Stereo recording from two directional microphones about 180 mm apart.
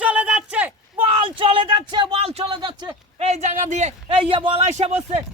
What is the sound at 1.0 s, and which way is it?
Speech, 30° right (ahead or behind).